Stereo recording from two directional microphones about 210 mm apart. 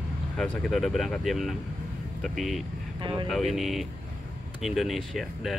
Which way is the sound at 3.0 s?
20° right (ahead or behind).